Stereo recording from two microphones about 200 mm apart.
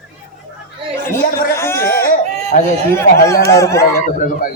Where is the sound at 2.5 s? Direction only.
40° left (ahead or behind).